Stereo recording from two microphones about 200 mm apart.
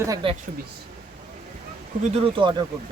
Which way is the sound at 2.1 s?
25° right (ahead or behind).